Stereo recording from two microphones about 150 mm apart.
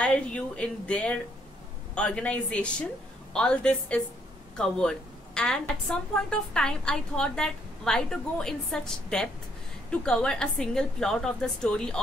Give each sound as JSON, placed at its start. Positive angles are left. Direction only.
{"t": 0.0, "sound": "a woman's voice", "side_deg": 5}